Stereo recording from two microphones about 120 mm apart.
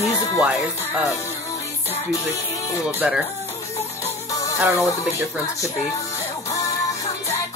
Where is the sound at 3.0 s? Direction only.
10° right (ahead or behind).